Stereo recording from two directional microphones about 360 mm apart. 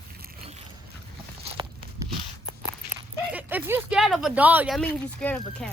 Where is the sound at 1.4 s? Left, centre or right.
Centre.